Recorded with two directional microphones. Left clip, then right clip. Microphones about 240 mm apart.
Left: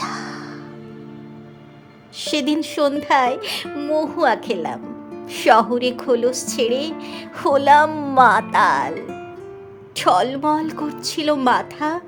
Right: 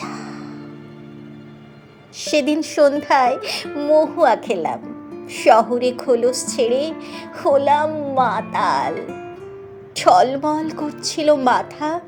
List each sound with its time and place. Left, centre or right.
0.0 s music: centre
2.3 s speech: centre
8.9 s speech: centre